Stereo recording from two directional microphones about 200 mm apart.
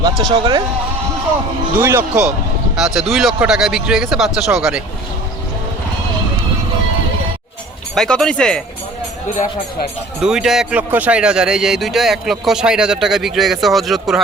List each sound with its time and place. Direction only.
0.0 s speech: 20° right (ahead or behind)
1.8 s a man's voice: 10° right (ahead or behind)
7.9 s a man's voice: 5° left (ahead or behind)
10.2 s a man's voice: 5° right (ahead or behind)